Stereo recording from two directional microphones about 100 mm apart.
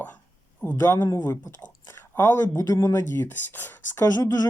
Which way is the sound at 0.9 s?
40° left (ahead or behind).